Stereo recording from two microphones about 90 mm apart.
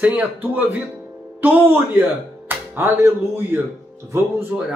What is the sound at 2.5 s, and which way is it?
Speech, 25° right (ahead or behind).